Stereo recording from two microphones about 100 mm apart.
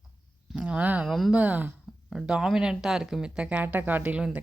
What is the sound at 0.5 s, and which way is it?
Speech, 10° right (ahead or behind).